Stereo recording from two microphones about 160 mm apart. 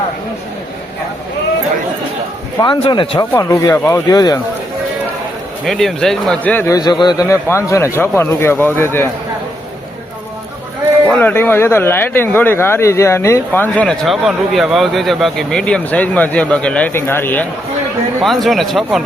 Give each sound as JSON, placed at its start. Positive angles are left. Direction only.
{"t": 2.6, "sound": "speech", "side_deg": 30}
{"t": 5.6, "sound": "speech", "side_deg": 0}
{"t": 6.7, "sound": "speech", "side_deg": 25}
{"t": 11.1, "sound": "speech", "side_deg": 10}
{"t": 18.2, "sound": "speech", "side_deg": 0}